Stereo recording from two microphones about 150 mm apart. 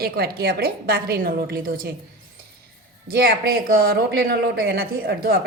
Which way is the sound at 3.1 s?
85° right.